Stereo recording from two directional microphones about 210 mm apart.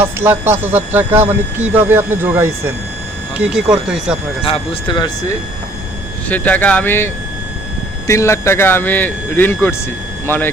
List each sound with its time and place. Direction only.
0.0 s speech: 10° right (ahead or behind)
3.8 s speech: 5° right (ahead or behind)
4.4 s speech: 25° left (ahead or behind)
6.2 s speech: 5° left (ahead or behind)